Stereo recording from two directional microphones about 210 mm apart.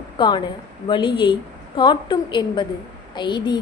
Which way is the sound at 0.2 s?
20° left (ahead or behind).